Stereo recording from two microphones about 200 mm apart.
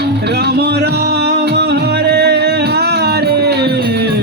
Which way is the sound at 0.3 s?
55° right (ahead or behind).